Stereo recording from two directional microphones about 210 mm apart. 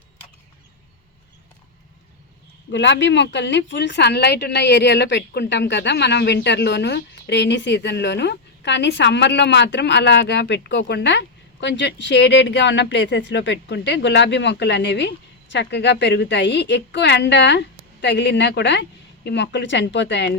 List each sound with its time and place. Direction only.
2.7 s a woman's voice: 55° left (ahead or behind)